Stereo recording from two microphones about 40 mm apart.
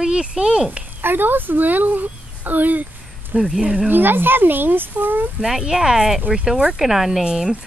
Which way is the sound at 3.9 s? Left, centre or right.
Right.